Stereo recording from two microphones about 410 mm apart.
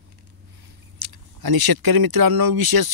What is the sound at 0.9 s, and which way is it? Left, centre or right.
Speech, right.